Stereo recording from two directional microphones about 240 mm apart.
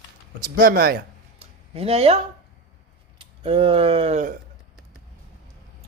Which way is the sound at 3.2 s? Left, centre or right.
Right.